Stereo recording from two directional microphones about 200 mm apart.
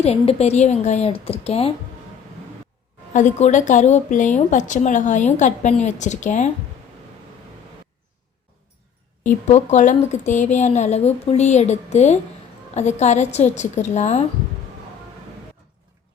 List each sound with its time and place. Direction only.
0.0 s speech: 30° left (ahead or behind)
3.1 s speech: 35° left (ahead or behind)
9.5 s speech: 35° left (ahead or behind)